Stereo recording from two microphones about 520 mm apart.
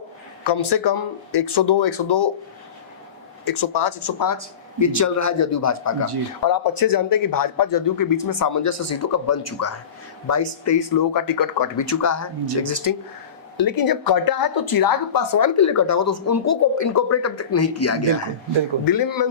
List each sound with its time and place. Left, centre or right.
0.4 s speech: left
3.4 s a woman's voice: left
18.9 s a woman's voice: left